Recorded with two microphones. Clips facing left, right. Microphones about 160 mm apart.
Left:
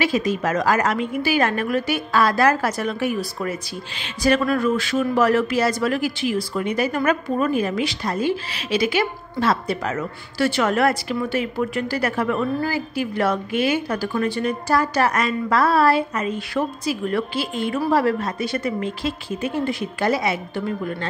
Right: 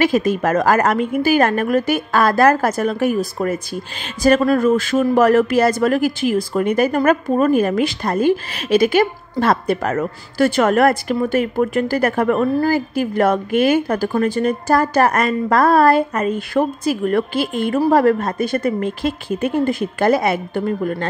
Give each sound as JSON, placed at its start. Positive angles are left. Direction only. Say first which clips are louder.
{"t": 0.0, "sound": "speech", "louder": "right 5 dB", "side_deg": -50}